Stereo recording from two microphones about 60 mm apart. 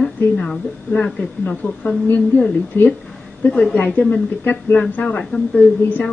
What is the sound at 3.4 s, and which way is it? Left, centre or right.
Speech, left.